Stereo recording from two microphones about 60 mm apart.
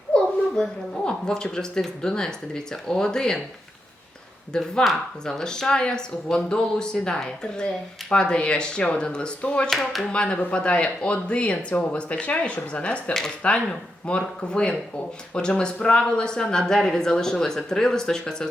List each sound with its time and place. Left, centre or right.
0.1 s speech: centre
4.5 s speech: centre
9.6 s speech: centre
10.0 s speech: centre